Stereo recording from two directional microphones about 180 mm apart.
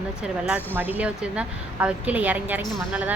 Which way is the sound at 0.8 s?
10° right (ahead or behind).